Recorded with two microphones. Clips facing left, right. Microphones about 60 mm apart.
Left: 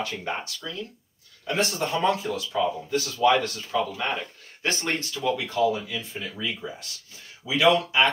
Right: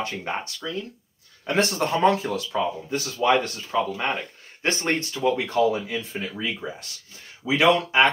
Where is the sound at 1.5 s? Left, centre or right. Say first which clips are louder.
Right 3 dB; right.